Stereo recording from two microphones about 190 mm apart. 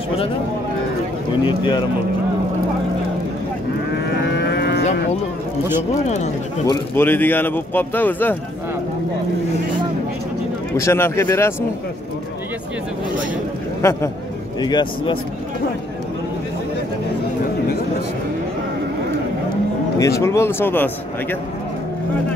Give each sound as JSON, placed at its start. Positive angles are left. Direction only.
{"t": 1.4, "sound": "speech", "side_deg": 25}
{"t": 3.9, "sound": "livestock", "side_deg": 60}
{"t": 6.0, "sound": "speech", "side_deg": 35}
{"t": 6.7, "sound": "speech", "side_deg": 10}
{"t": 10.8, "sound": "speech", "side_deg": 15}
{"t": 13.8, "sound": "speech", "side_deg": 15}
{"t": 20.0, "sound": "speech", "side_deg": 15}